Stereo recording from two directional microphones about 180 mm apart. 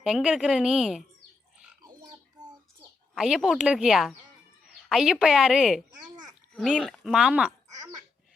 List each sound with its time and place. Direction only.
0.0 s a woman's voice: 5° right (ahead or behind)
1.8 s a sound: 20° right (ahead or behind)
3.2 s a woman's voice: 5° right (ahead or behind)